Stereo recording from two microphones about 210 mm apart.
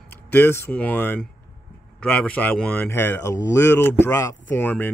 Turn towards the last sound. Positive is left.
turn(degrees=10)  # may be behind; listen again after turning